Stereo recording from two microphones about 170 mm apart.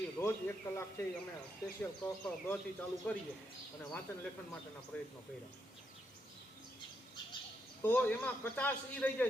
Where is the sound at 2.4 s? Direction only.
10° left (ahead or behind).